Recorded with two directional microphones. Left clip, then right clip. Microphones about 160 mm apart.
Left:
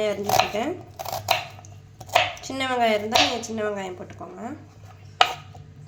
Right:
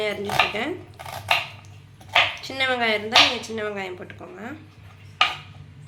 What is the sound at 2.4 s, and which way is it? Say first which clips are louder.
Speech: even; 50° left (ahead or behind).